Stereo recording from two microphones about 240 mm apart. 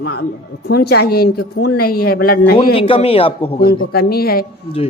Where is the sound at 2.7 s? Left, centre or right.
Left.